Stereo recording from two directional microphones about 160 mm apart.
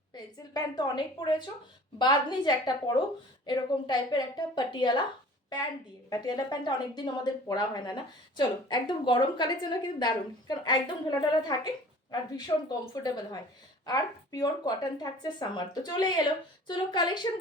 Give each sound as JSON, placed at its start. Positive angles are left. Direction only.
{"t": 0.1, "sound": "speech", "side_deg": 25}
{"t": 6.1, "sound": "speech", "side_deg": 25}